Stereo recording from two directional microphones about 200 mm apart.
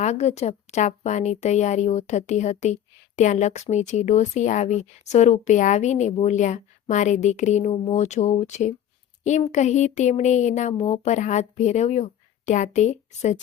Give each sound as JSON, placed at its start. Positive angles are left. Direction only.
{"t": 0.0, "sound": "speech", "side_deg": 35}